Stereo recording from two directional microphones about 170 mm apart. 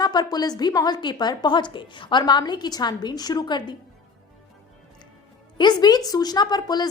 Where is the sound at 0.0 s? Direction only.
25° left (ahead or behind).